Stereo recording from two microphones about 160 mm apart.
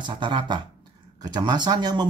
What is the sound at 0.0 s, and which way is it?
Speech, 30° right (ahead or behind).